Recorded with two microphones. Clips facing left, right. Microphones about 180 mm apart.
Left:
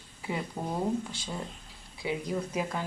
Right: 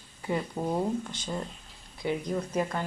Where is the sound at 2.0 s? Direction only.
5° left (ahead or behind).